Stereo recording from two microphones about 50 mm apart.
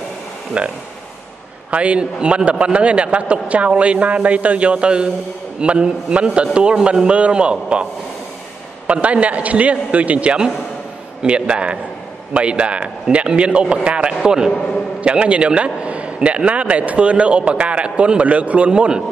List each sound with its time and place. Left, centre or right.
0.6 s a man's voice: right